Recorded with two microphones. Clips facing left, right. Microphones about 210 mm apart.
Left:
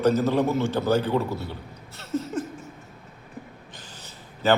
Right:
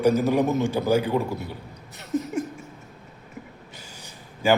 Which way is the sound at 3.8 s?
10° right (ahead or behind).